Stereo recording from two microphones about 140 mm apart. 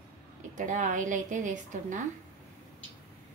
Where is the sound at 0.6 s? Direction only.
65° right (ahead or behind).